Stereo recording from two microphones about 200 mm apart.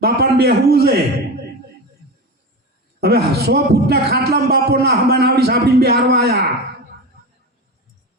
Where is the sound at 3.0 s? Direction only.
55° right (ahead or behind).